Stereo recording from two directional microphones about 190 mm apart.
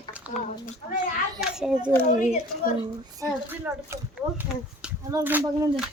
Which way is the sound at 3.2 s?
10° right (ahead or behind).